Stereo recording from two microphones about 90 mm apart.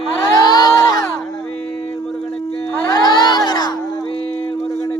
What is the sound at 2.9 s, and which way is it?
Crowd, 50° left (ahead or behind).